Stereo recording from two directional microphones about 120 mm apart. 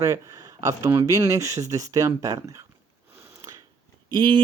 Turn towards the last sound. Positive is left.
turn(degrees=-40)  # may be behind; listen again after turning